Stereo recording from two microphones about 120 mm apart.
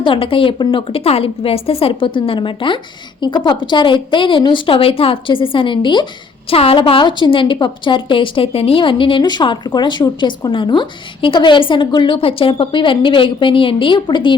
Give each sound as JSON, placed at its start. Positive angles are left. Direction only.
{"t": 0.0, "sound": "a woman's voice", "side_deg": 45}
{"t": 6.5, "sound": "a woman's voice", "side_deg": 50}